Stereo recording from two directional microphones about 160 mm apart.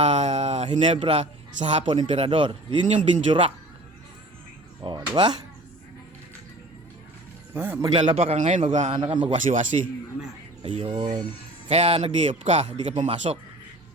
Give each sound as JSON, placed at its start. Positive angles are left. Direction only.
{"t": 0.0, "sound": "a sound", "side_deg": -45}
{"t": 0.7, "sound": "speech", "side_deg": -35}
{"t": 4.8, "sound": "a sound", "side_deg": -30}
{"t": 7.5, "sound": "a man's voice", "side_deg": -20}
{"t": 7.9, "sound": "a man's voice", "side_deg": -40}
{"t": 9.0, "sound": "a man's voice", "side_deg": -30}
{"t": 9.3, "sound": "a man's voice", "side_deg": -50}
{"t": 10.6, "sound": "a man's voice", "side_deg": -35}